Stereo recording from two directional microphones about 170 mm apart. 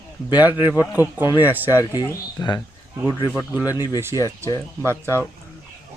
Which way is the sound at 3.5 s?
10° right (ahead or behind).